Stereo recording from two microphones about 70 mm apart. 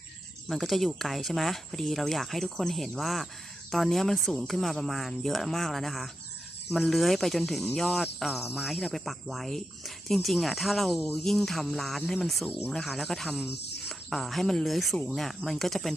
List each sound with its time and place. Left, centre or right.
0.4 s speech: centre
13.3 s a sound: centre
14.1 s speech: centre